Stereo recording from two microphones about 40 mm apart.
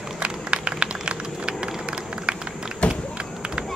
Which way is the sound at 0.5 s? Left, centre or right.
Right.